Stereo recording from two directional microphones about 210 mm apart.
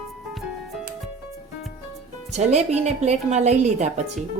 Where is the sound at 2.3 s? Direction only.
35° right (ahead or behind).